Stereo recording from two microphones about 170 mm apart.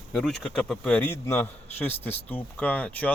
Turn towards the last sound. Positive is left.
turn(degrees=10)  # may be behind; listen again after turning